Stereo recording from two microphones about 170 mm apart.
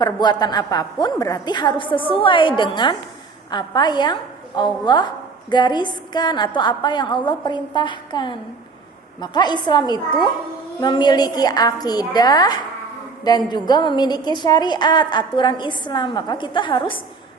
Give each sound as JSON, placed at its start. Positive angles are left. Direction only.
{"t": 0.0, "sound": "a woman's voice", "side_deg": 25}